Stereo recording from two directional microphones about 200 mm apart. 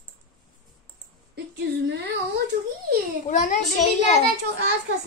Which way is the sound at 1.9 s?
55° right (ahead or behind).